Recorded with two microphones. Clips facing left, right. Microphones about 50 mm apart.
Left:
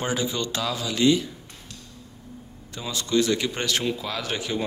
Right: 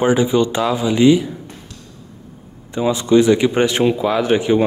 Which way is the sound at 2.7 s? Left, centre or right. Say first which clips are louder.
Right 11 dB; right.